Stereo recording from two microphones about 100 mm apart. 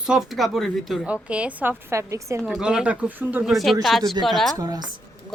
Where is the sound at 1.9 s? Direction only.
30° right (ahead or behind).